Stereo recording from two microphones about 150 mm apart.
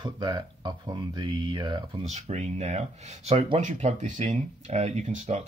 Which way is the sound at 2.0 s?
45° right (ahead or behind).